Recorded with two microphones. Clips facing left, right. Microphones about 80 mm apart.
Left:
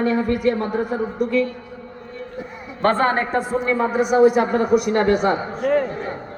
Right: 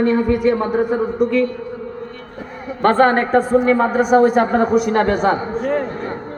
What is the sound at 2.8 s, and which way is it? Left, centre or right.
Speech, right.